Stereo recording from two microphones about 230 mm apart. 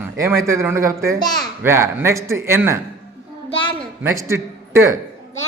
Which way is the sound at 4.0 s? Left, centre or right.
Centre.